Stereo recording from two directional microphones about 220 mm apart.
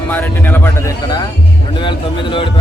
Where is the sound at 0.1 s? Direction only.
10° left (ahead or behind).